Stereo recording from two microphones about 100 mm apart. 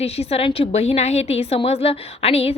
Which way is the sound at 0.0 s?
90° left.